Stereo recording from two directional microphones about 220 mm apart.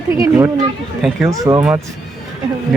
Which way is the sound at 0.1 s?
15° right (ahead or behind).